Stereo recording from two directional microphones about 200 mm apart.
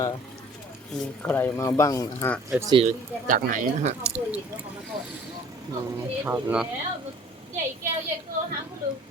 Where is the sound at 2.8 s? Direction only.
40° right (ahead or behind).